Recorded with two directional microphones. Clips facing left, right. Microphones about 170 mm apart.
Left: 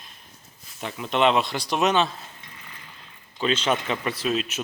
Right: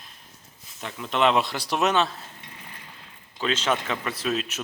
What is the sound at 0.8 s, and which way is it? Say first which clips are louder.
Speech: left 1 dB; 5° left (ahead or behind).